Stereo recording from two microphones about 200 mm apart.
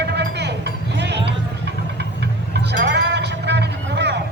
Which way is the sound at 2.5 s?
55° right (ahead or behind).